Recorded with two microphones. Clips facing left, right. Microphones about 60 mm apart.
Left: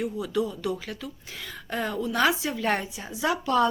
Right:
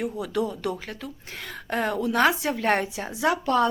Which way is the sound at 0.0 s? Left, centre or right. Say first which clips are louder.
Right 1 dB; right.